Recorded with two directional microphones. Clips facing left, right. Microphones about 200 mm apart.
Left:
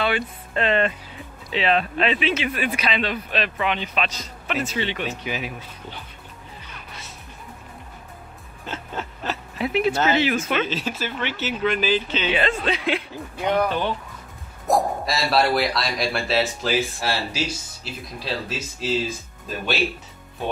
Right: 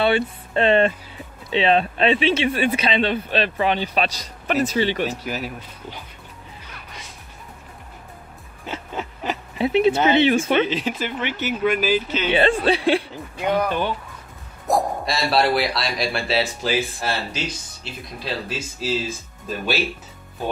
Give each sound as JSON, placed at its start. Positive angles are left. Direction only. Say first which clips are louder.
{"t": 0.0, "sound": "speech", "louder": "right 5 dB", "side_deg": -30}
{"t": 5.2, "sound": "speech", "louder": "right 1 dB", "side_deg": 0}
{"t": 8.6, "sound": "a sound", "louder": "right 2 dB", "side_deg": -10}
{"t": 9.6, "sound": "speech", "louder": "right 4 dB", "side_deg": -25}
{"t": 10.7, "sound": "speech", "louder": "right 3 dB", "side_deg": -15}
{"t": 12.3, "sound": "speech", "louder": "right 6 dB", "side_deg": -30}
{"t": 13.5, "sound": "speech", "louder": "even", "side_deg": -10}
{"t": 14.7, "sound": "speech", "louder": "even", "side_deg": 0}